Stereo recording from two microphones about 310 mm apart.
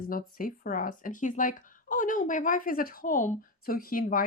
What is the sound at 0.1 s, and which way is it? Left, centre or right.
Speech, left.